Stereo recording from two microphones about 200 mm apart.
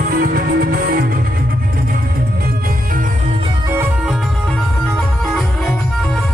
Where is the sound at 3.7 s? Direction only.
5° right (ahead or behind).